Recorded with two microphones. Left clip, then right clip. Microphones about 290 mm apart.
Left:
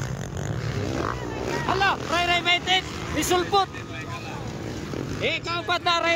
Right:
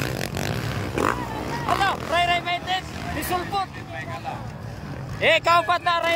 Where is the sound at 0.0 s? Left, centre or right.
Right.